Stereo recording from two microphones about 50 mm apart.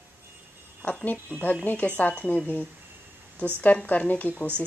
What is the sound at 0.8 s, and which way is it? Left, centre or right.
A woman's voice, left.